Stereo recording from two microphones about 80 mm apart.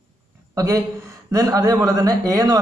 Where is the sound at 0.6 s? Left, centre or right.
Right.